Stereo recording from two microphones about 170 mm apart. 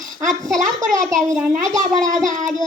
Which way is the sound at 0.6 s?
50° right (ahead or behind).